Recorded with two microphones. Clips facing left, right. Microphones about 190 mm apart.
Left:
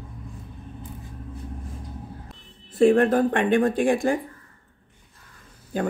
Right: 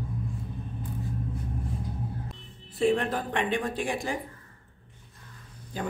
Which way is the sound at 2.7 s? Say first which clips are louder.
Left 8 dB; 50° left (ahead or behind).